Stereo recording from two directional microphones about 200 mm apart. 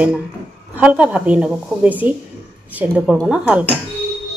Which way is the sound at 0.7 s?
5° right (ahead or behind).